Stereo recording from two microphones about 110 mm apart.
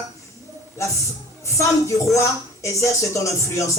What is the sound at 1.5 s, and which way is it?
Speech, 30° left (ahead or behind).